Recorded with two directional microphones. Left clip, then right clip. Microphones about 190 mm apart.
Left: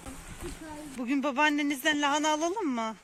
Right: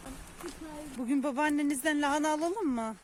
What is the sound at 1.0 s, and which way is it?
Speech, 10° right (ahead or behind).